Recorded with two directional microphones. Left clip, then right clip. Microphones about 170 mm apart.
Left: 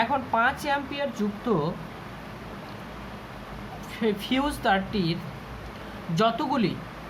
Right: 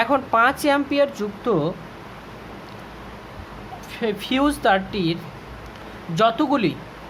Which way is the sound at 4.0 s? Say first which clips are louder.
Right 5 dB; 40° right (ahead or behind).